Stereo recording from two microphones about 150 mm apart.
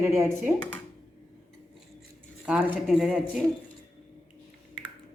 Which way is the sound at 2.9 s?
5° right (ahead or behind).